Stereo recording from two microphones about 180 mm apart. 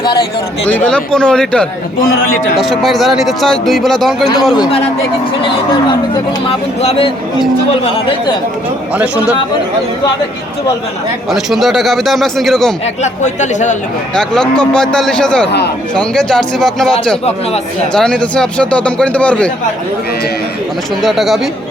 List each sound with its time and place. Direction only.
0.7 s speech: 5° left (ahead or behind)
6.1 s speech: 30° left (ahead or behind)
9.0 s speech: 5° right (ahead or behind)
11.3 s speech: centre (ahead or behind)
12.8 s speech: 40° left (ahead or behind)
14.2 s speech: 5° left (ahead or behind)
15.4 s a man's voice: 65° left (ahead or behind)
16.0 s speech: 5° left (ahead or behind)
21.0 s speech: centre (ahead or behind)